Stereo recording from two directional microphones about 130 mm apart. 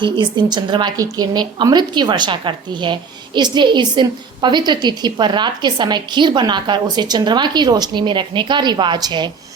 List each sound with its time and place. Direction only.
0.0 s a woman's voice: 35° right (ahead or behind)